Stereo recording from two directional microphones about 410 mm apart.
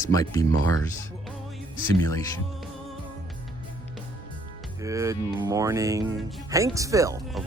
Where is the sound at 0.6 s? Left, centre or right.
Right.